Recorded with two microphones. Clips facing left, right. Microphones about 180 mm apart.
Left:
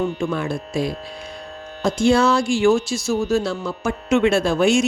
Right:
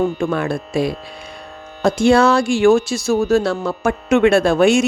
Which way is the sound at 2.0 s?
65° right (ahead or behind).